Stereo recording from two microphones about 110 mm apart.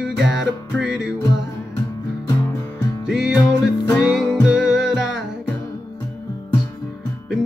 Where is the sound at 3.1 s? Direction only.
5° right (ahead or behind).